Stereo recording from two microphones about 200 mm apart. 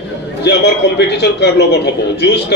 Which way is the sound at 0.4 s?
55° left (ahead or behind).